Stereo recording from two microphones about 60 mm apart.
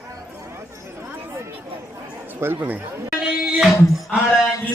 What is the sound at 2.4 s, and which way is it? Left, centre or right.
Speech, right.